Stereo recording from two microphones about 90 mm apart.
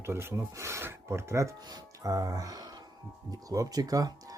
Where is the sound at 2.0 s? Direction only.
40° right (ahead or behind).